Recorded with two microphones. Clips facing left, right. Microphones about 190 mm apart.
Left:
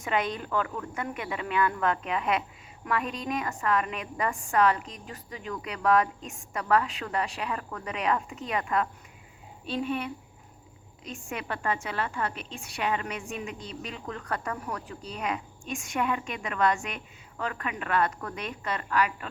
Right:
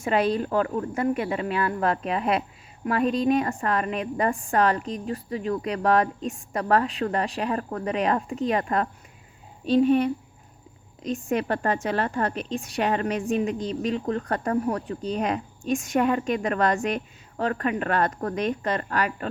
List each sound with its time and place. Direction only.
0.0 s speech: 35° right (ahead or behind)
11.1 s speech: 35° right (ahead or behind)
11.9 s a woman's voice: 50° right (ahead or behind); by 19.3 s 35° right (ahead or behind)